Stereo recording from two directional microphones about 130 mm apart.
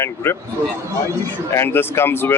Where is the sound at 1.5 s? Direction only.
20° left (ahead or behind).